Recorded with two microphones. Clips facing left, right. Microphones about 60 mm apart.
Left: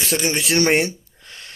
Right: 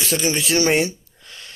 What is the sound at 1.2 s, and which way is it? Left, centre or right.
Gasp, left.